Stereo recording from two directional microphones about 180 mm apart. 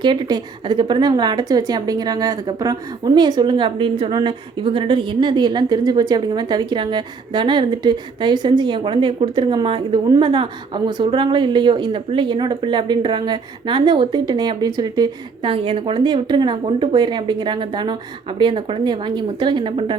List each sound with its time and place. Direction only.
0.0 s a woman's voice: 25° right (ahead or behind)